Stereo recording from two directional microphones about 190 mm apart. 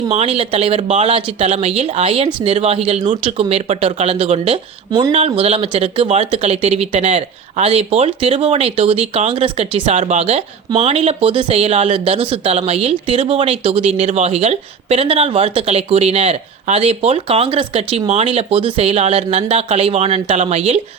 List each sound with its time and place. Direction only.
0.1 s speech: 30° right (ahead or behind)
4.9 s speech: 20° right (ahead or behind)
5.1 s speech: 30° right (ahead or behind)